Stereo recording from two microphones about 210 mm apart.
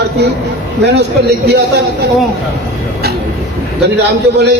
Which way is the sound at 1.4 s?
55° right (ahead or behind).